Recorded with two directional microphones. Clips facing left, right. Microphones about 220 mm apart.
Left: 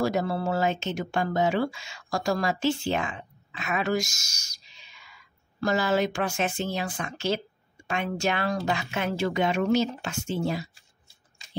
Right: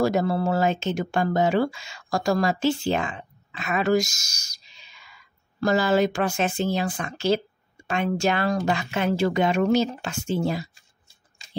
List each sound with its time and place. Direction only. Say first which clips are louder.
0.0 s speech: right 4 dB; 40° right (ahead or behind)
5.6 s speech: right 4 dB; 35° right (ahead or behind)